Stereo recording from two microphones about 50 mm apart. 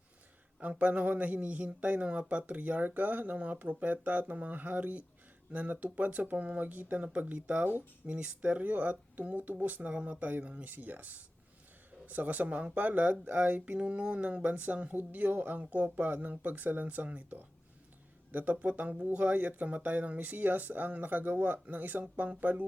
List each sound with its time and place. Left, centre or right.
0.6 s speech: right
10.7 s speech: right
13.7 s speech: right